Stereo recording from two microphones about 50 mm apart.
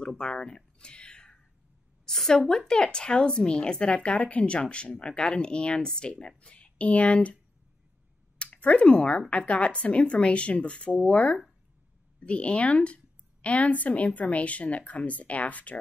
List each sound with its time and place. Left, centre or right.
0.2 s a sound: centre
2.0 s a woman's voice: centre; by 7.3 s left
8.4 s a woman's voice: left